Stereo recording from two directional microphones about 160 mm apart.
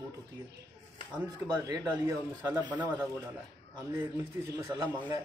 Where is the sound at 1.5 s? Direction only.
25° right (ahead or behind).